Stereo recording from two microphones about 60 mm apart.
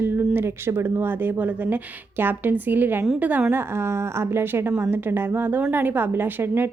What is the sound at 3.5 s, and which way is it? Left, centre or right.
A woman's voice, right.